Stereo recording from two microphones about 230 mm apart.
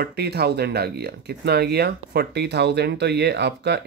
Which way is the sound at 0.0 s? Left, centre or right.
Right.